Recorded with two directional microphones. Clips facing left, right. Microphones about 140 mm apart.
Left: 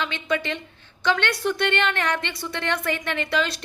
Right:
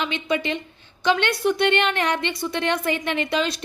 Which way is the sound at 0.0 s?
15° right (ahead or behind).